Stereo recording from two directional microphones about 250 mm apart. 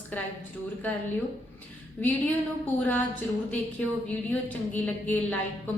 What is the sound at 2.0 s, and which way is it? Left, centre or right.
Speech, centre.